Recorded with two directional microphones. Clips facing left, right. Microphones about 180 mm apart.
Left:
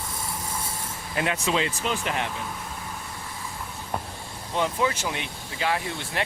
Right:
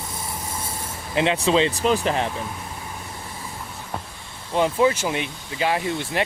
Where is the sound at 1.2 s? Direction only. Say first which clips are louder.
Right 6 dB; 25° right (ahead or behind).